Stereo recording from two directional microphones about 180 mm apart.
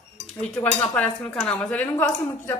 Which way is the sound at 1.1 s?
5° left (ahead or behind).